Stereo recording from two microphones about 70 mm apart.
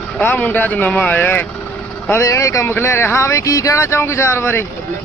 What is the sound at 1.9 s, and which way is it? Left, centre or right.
Vehicle, left.